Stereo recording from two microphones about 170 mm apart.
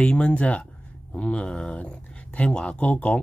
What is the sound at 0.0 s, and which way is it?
Speech, 5° left (ahead or behind).